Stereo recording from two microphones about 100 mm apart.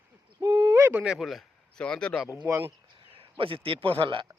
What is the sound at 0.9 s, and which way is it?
Speech, 10° right (ahead or behind).